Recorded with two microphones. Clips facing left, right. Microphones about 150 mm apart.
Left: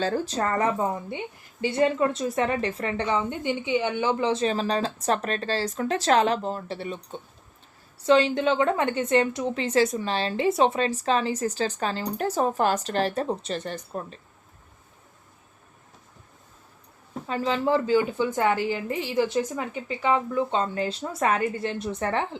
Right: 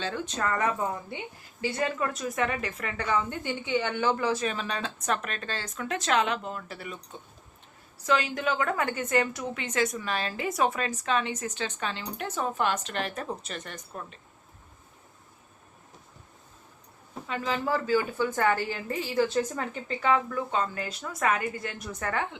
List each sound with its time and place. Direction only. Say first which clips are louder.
0.0 s a woman's voice: left 5 dB; 35° left (ahead or behind)
17.2 s a woman's voice: left 5 dB; 30° left (ahead or behind)